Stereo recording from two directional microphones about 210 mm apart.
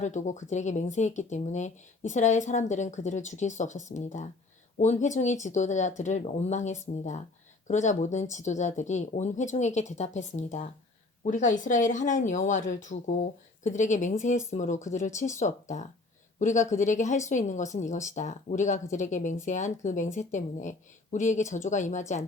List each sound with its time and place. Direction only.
0.0 s speech: 35° left (ahead or behind)